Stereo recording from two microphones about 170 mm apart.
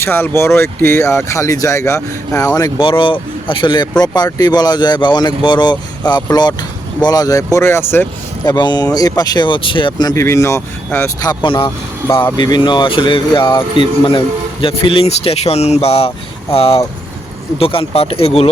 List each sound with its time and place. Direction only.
0.0 s speech: 15° left (ahead or behind)
8.4 s speech: 25° left (ahead or behind)